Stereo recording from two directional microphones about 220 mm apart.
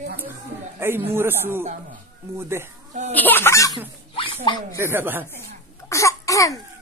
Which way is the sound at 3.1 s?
10° left (ahead or behind).